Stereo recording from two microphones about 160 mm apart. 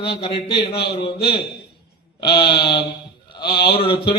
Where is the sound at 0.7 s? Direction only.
85° left.